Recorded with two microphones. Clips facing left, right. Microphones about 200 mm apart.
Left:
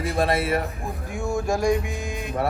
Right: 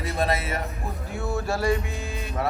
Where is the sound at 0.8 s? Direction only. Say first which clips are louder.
Left 2 dB; 15° left (ahead or behind).